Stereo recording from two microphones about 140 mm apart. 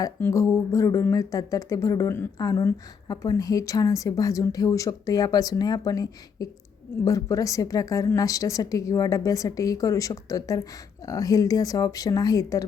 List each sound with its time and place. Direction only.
0.2 s speech: 20° left (ahead or behind)